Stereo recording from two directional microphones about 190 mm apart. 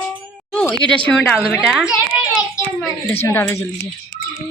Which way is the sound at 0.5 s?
5° left (ahead or behind).